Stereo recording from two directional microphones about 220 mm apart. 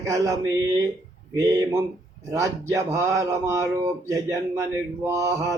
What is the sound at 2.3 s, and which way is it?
A man's voice, 15° right (ahead or behind).